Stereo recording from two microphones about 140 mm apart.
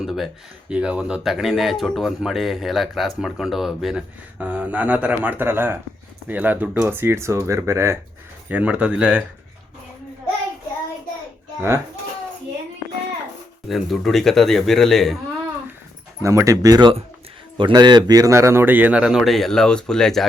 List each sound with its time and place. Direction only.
0.0 s a sound: centre (ahead or behind)
0.7 s a man's voice: 5° right (ahead or behind)
13.7 s speech: centre (ahead or behind)
16.2 s a man's voice: 20° right (ahead or behind); by 20.2 s 5° left (ahead or behind)